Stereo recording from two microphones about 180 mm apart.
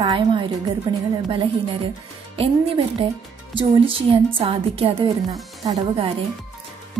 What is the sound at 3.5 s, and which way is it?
A woman's voice, 30° right (ahead or behind).